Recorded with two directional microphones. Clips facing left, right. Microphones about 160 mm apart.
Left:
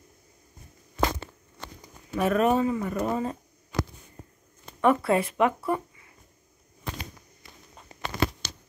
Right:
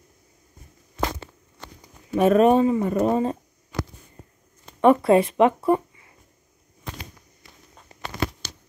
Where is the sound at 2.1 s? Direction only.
25° right (ahead or behind).